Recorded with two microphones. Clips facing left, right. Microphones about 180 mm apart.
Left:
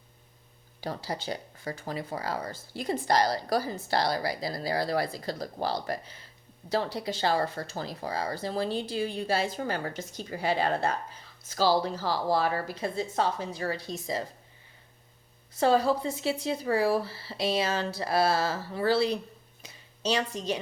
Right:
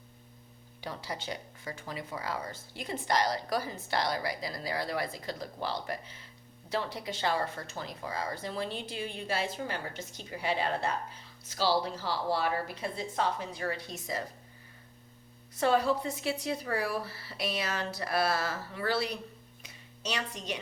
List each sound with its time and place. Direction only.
0.8 s speech: 35° left (ahead or behind)
15.5 s a woman's voice: 30° left (ahead or behind)